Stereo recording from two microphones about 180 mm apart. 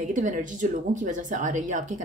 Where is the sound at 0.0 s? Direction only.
45° right (ahead or behind).